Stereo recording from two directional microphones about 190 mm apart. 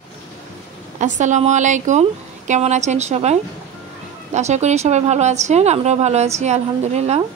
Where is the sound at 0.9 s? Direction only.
40° right (ahead or behind).